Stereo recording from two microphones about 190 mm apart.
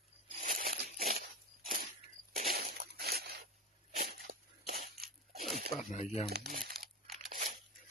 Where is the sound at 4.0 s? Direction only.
55° right (ahead or behind).